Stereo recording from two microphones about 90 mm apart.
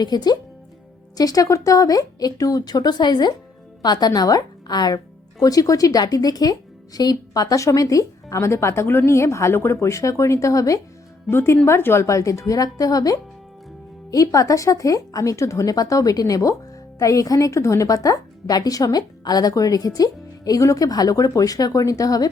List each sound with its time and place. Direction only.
0.0 s a woman's voice: 50° left (ahead or behind)
11.3 s a woman's voice: 30° left (ahead or behind)